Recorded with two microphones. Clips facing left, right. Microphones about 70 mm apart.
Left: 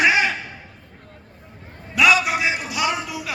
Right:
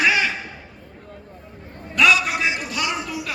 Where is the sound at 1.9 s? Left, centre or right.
Centre.